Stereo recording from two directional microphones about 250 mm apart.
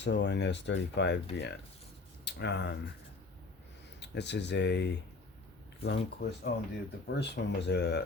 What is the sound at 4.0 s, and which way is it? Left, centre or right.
Speech, left.